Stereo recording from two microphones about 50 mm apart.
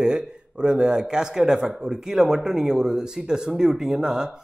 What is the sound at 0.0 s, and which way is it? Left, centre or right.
Speech, centre.